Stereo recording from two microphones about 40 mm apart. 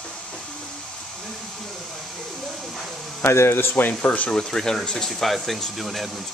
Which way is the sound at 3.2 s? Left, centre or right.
Left.